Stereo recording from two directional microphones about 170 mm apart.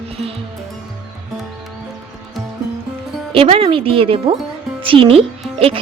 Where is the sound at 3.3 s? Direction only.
30° right (ahead or behind).